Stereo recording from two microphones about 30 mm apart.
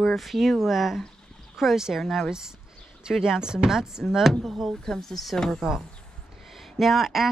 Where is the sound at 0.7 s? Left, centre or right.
Centre.